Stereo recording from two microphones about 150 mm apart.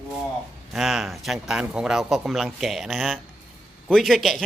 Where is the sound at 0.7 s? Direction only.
Centre (ahead or behind).